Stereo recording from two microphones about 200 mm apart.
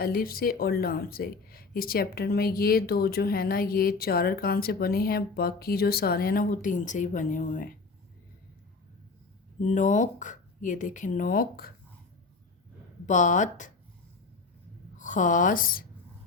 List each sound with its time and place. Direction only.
0.0 s speech: 50° left (ahead or behind)
9.6 s speech: 40° left (ahead or behind)
13.1 s speech: 40° left (ahead or behind)
14.9 s speech: 40° left (ahead or behind)